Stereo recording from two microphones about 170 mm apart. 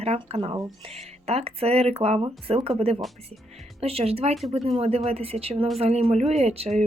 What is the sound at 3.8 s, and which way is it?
Speech, 35° right (ahead or behind).